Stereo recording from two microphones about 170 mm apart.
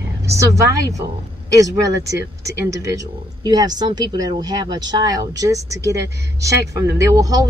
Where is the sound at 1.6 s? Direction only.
20° right (ahead or behind).